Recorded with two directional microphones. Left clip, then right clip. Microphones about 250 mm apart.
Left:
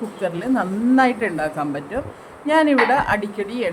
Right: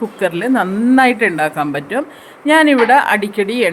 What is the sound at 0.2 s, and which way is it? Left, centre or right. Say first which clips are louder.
A woman's voice: right 6 dB; centre.